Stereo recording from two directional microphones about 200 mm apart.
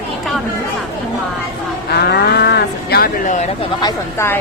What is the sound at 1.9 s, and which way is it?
Speech, 55° left (ahead or behind).